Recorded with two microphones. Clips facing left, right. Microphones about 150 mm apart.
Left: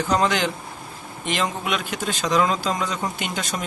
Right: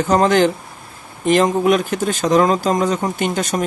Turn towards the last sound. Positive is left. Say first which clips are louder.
# right 9 dB
turn(degrees=-45)  # may be behind; listen again after turning